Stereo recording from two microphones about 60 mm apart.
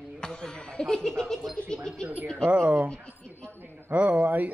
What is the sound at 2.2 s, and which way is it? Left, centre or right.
Speech, centre.